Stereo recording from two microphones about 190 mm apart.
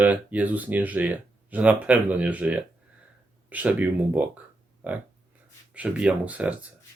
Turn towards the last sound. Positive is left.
turn(degrees=-5)  # may be behind; listen again after turning